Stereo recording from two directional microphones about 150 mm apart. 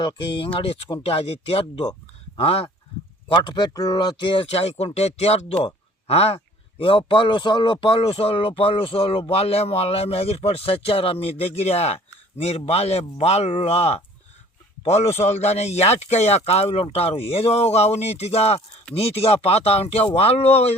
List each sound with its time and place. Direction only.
0.0 s speech: 30° left (ahead or behind)
3.2 s speech: 30° left (ahead or behind)